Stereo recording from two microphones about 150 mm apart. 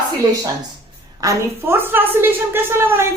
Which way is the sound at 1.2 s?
20° right (ahead or behind).